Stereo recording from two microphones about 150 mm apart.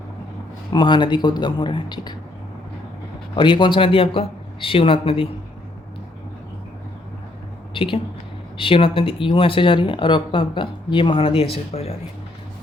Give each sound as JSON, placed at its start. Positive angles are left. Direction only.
{"t": 0.7, "sound": "speech", "side_deg": 30}
{"t": 3.3, "sound": "speech", "side_deg": 30}
{"t": 7.7, "sound": "speech", "side_deg": 35}